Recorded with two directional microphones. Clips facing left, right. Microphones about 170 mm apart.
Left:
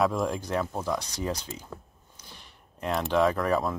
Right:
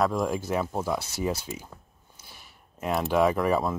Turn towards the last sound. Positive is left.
turn(degrees=-5)  # may be behind; listen again after turning